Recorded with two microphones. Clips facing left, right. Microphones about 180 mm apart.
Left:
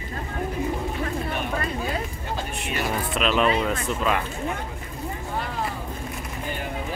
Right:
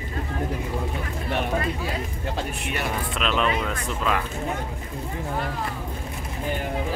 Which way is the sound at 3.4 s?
30° left (ahead or behind).